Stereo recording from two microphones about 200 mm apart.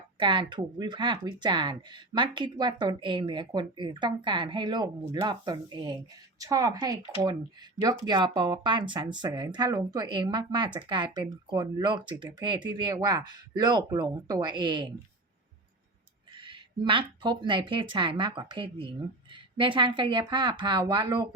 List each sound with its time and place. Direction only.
0.2 s speech: 25° right (ahead or behind)
16.3 s speech: 25° right (ahead or behind)